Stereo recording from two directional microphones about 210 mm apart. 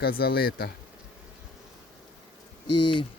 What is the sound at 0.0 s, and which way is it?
Speech, 45° left (ahead or behind).